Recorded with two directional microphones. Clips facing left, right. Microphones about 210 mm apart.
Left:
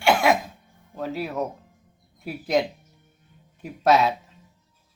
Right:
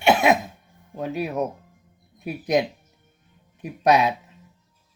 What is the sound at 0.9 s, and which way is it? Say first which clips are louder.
Speech: right 2 dB; 20° right (ahead or behind).